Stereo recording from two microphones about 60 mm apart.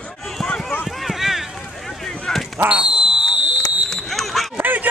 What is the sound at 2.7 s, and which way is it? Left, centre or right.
Basketball bounce, centre.